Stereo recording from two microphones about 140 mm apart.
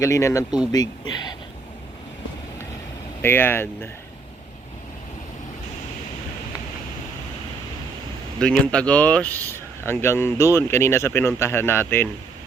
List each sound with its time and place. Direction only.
0.0 s speech: 20° left (ahead or behind)
3.2 s speech: 15° left (ahead or behind)
8.4 s speech: 10° left (ahead or behind)